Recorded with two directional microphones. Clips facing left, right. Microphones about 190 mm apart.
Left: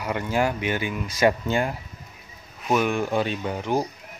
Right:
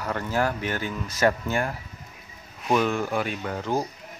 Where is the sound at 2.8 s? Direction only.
15° left (ahead or behind).